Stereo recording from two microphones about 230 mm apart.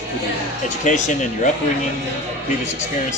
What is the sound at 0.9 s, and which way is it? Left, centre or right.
Speech, left.